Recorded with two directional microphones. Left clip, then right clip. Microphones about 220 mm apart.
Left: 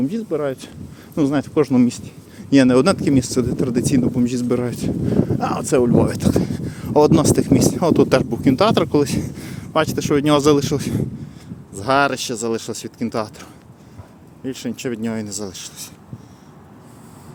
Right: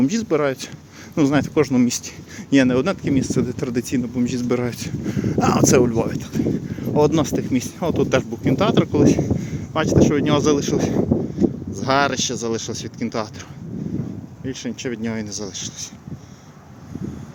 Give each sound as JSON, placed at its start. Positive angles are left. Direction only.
{"t": 0.0, "sound": "speech", "side_deg": -10}
{"t": 0.4, "sound": "speech", "side_deg": 5}
{"t": 6.0, "sound": "speech", "side_deg": 30}
{"t": 14.4, "sound": "speech", "side_deg": 15}